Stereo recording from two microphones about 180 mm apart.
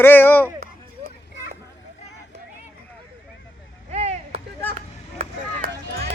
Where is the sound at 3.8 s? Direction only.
35° right (ahead or behind).